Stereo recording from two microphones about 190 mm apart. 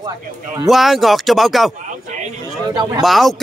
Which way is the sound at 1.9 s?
40° right (ahead or behind).